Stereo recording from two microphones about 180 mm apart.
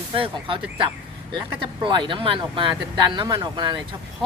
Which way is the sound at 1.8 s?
25° right (ahead or behind).